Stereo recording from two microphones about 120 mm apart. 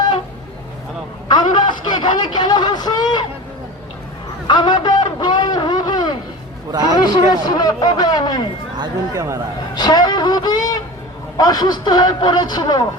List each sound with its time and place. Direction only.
1.3 s a sound: 40° left (ahead or behind)
4.4 s a sound: 40° left (ahead or behind)
6.7 s a man's voice: 35° right (ahead or behind)
7.0 s a man's voice: 35° left (ahead or behind)
9.1 s speech: 25° right (ahead or behind)
9.7 s a man's voice: 35° left (ahead or behind)